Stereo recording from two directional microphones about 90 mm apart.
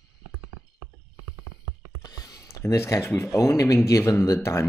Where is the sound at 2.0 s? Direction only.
45° left (ahead or behind).